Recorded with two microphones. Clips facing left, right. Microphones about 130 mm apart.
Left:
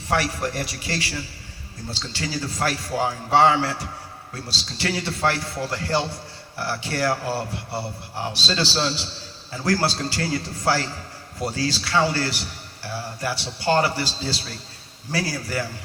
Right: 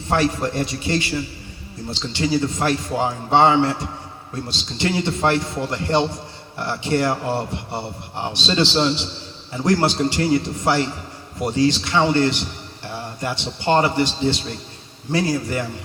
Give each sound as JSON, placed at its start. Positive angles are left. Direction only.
{"t": 0.1, "sound": "a man's voice", "side_deg": -25}